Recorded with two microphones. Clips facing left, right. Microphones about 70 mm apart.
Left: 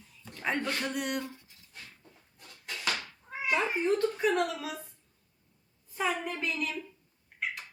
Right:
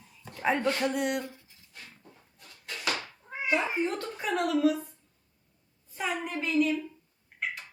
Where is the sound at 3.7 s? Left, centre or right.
Centre.